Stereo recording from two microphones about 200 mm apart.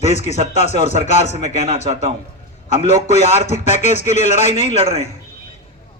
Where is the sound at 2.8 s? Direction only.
35° left (ahead or behind).